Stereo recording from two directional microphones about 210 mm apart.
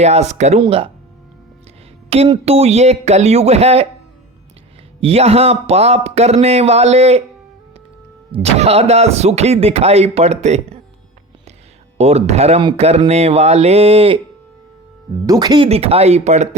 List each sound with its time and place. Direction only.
0.0 s speech: 30° right (ahead or behind)
2.0 s speech: 30° right (ahead or behind)
4.9 s speech: 30° right (ahead or behind)
8.3 s speech: 30° right (ahead or behind)
11.9 s speech: 30° right (ahead or behind)
15.3 s speech: 20° right (ahead or behind)